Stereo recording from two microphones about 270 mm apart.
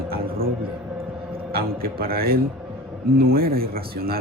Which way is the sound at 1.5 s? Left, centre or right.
Right.